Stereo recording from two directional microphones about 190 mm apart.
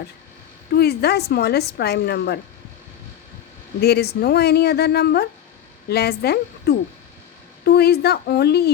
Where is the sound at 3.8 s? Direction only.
60° left (ahead or behind).